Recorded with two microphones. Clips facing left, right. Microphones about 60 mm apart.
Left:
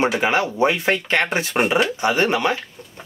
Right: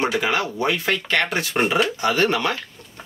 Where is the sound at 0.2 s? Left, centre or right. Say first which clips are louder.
Left 4 dB; left.